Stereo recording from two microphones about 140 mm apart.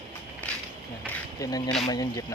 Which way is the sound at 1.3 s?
25° left (ahead or behind).